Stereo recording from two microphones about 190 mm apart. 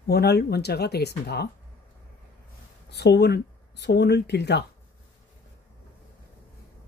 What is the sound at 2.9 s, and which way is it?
Speech, 60° left (ahead or behind).